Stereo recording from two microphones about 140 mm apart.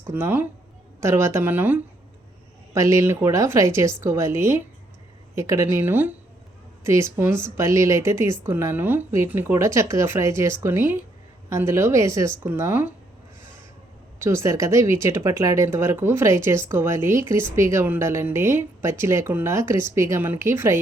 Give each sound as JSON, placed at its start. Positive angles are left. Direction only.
{"t": 0.1, "sound": "a woman's voice", "side_deg": -15}
{"t": 14.2, "sound": "a woman's voice", "side_deg": -20}